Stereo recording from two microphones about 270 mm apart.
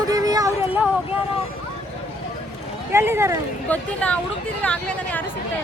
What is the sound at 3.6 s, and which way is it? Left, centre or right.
Speech, centre.